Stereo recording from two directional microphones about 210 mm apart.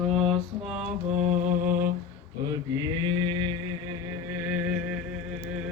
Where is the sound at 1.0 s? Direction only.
35° right (ahead or behind).